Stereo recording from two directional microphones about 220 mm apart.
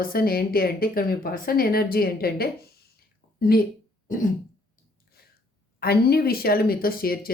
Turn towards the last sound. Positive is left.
turn(degrees=40)  # may be behind; listen again after turning